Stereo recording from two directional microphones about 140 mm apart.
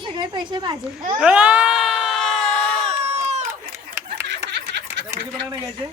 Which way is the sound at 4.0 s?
15° right (ahead or behind).